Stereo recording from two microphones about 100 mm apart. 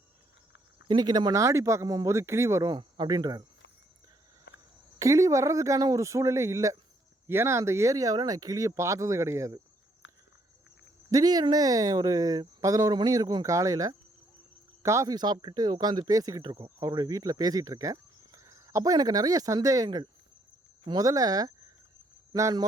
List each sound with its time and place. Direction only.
0.9 s speech: 45° right (ahead or behind); by 2.6 s 30° right (ahead or behind)
2.6 s speech: 45° right (ahead or behind)
4.9 s speech: 35° right (ahead or behind)
11.1 s speech: 40° right (ahead or behind)
16.6 s speech: 30° right (ahead or behind)